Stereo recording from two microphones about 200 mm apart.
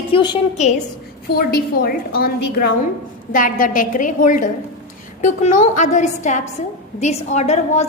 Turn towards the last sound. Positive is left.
turn(degrees=35)  # may be behind; listen again after turning